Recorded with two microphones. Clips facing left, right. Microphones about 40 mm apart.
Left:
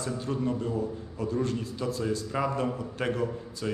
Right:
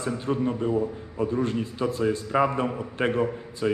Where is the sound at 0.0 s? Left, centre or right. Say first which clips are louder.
Right 4 dB; right.